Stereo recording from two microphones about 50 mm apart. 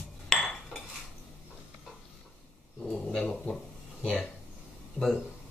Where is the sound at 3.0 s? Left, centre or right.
Centre.